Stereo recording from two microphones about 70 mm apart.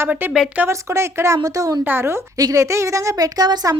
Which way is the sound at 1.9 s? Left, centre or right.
Right.